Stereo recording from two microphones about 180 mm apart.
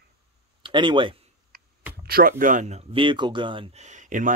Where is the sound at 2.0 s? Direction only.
55° right (ahead or behind); by 3.6 s 25° right (ahead or behind).